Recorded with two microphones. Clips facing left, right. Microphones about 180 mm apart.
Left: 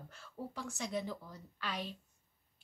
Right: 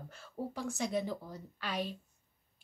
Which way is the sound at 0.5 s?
45° right (ahead or behind).